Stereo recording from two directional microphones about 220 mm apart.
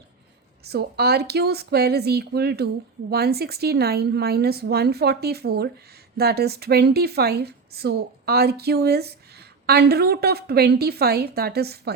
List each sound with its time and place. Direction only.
0.6 s a woman's voice: 45° right (ahead or behind)